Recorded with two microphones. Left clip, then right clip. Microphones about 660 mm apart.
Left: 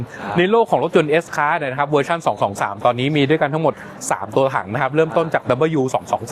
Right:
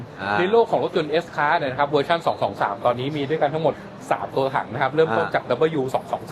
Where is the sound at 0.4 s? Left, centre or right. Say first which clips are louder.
Left 4 dB; left.